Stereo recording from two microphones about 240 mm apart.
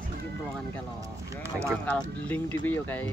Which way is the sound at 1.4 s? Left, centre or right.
Centre.